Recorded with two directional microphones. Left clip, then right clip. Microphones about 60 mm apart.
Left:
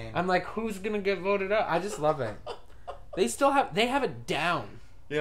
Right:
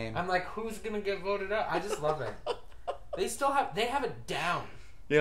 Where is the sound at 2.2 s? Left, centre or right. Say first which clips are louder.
Right 1 dB; right.